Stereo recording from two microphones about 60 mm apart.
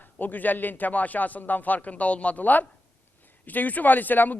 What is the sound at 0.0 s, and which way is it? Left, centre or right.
A man's voice, left.